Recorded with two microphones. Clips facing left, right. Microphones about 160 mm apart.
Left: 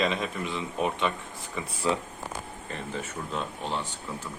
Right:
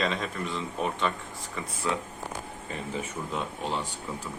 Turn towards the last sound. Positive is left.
turn(degrees=-10)  # may be behind; listen again after turning